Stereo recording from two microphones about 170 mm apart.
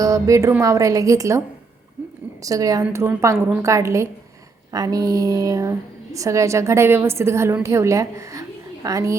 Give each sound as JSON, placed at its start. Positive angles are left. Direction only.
{"t": 0.0, "sound": "a woman's voice", "side_deg": -20}
{"t": 2.4, "sound": "a woman's voice", "side_deg": -20}